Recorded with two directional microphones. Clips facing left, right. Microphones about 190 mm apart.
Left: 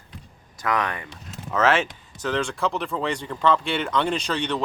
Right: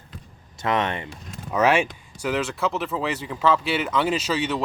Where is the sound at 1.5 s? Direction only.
15° right (ahead or behind).